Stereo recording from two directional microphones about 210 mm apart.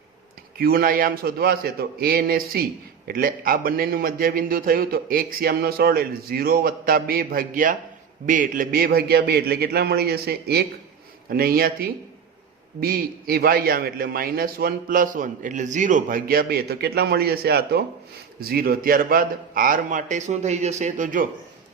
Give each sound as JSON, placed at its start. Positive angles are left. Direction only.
{"t": 0.6, "sound": "a man's voice", "side_deg": -45}